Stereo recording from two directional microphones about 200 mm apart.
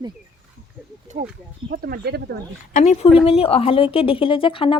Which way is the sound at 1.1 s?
35° right (ahead or behind).